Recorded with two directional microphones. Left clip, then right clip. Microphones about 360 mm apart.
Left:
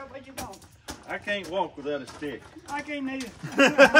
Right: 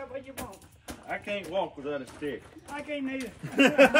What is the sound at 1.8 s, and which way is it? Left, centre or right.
Speech, centre.